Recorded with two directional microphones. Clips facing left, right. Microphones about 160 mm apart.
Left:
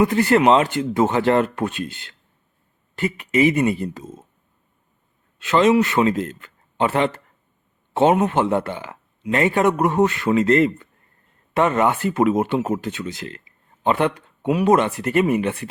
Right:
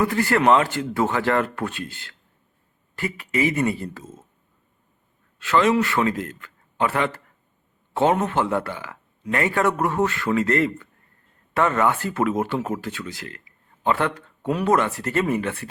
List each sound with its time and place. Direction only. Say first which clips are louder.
0.0 s speech: left 4 dB; 20° left (ahead or behind)
5.4 s speech: left 3 dB; 20° left (ahead or behind)